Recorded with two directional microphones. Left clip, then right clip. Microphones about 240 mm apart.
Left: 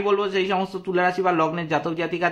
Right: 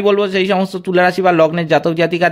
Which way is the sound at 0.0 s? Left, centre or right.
Right.